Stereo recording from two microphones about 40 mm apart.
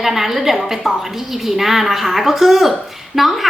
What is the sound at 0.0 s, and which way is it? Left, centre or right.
A woman's voice, centre.